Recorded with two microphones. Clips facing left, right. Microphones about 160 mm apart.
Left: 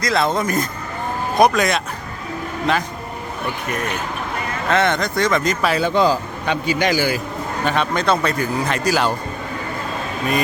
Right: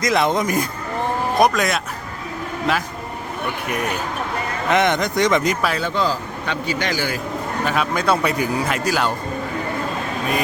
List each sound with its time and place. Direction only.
0.0 s speech: 15° right (ahead or behind)
1.4 s speech: centre (ahead or behind)
4.7 s speech: 15° right (ahead or behind)
5.6 s a man's voice: 5° left (ahead or behind)
7.6 s speech: 5° right (ahead or behind)